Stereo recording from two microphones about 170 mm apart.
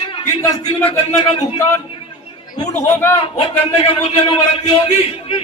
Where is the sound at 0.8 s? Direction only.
30° left (ahead or behind).